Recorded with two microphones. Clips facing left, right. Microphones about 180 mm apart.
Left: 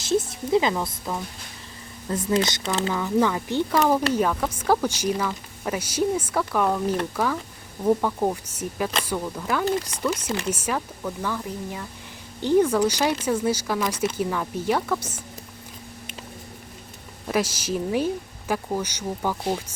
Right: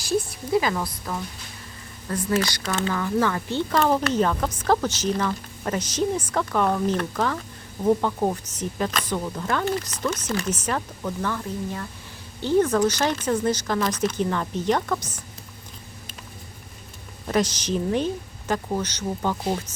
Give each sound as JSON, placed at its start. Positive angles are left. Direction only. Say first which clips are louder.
{"t": 0.0, "sound": "a sound", "louder": "left 2 dB", "side_deg": 20}
{"t": 2.0, "sound": "speech", "louder": "left 1 dB", "side_deg": 20}
{"t": 17.2, "sound": "speech", "louder": "right 1 dB", "side_deg": 5}